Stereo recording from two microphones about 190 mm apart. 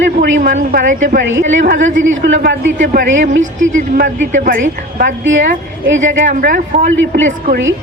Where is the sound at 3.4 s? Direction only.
40° right (ahead or behind).